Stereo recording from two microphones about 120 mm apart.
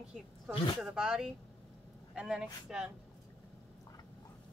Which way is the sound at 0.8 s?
5° right (ahead or behind).